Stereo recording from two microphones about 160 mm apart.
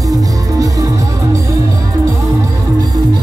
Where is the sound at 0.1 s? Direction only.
20° right (ahead or behind).